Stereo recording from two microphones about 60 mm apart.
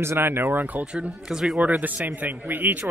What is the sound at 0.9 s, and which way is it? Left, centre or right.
Speech, centre.